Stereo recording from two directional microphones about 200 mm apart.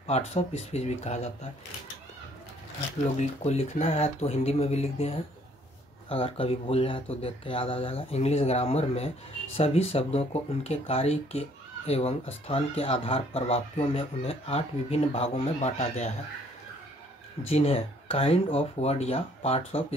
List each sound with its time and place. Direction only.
0.3 s speech: 30° left (ahead or behind)
3.2 s speech: 35° left (ahead or behind)
17.5 s speech: 30° left (ahead or behind)